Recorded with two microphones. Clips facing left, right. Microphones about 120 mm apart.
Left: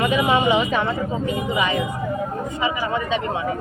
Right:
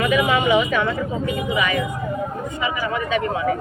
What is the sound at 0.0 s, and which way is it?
Speech, 30° left (ahead or behind).